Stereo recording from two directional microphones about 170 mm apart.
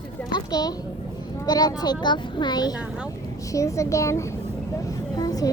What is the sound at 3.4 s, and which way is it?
A woman's voice, 20° left (ahead or behind).